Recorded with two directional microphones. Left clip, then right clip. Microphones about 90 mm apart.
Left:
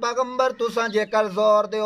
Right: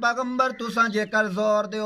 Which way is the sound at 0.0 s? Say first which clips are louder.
Left 1 dB; 25° left (ahead or behind).